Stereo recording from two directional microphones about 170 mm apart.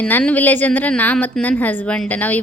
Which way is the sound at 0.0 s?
10° left (ahead or behind).